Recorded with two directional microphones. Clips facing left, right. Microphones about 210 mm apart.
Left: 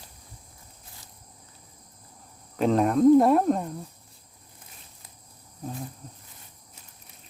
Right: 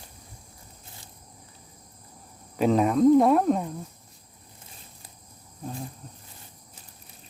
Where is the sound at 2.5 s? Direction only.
5° right (ahead or behind).